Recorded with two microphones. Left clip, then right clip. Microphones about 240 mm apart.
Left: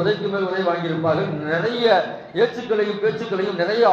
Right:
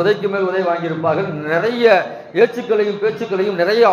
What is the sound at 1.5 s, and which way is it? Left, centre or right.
A man's voice, right.